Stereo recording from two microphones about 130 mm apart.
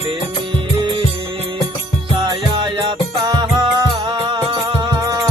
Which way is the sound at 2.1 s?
35° right (ahead or behind).